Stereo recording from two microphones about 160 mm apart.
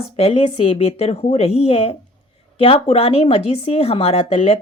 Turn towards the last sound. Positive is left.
turn(degrees=40)  # may be behind; listen again after turning